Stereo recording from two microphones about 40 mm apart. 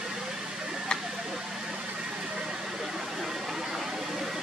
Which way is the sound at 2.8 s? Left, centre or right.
Centre.